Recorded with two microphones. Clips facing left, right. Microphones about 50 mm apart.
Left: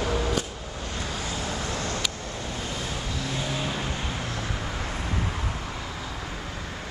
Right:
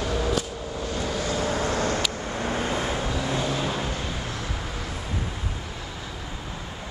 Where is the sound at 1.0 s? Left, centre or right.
Right.